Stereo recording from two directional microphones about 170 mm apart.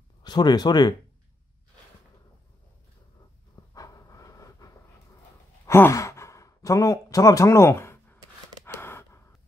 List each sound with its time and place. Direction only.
0.2 s speech: 25° left (ahead or behind)
3.7 s a sound: 20° left (ahead or behind)
5.7 s sigh: 15° left (ahead or behind)
8.6 s gasp: 15° left (ahead or behind)